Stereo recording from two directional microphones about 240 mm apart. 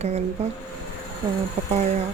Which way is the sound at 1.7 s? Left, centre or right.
Right.